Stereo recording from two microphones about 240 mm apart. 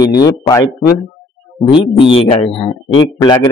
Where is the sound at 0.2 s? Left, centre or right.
Centre.